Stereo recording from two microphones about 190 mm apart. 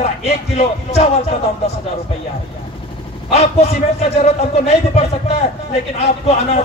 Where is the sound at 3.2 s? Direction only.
35° left (ahead or behind).